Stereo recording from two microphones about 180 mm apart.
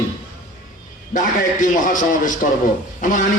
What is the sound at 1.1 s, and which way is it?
A man's voice, 45° left (ahead or behind).